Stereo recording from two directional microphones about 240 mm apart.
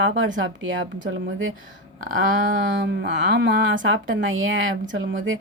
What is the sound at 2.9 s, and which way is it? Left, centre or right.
A woman's voice, right.